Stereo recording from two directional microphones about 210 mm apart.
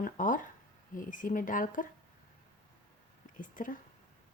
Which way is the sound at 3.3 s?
40° left (ahead or behind).